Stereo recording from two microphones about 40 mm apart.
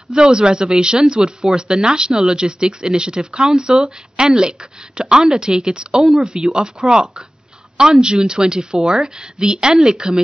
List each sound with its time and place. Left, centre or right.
0.1 s a woman's voice: centre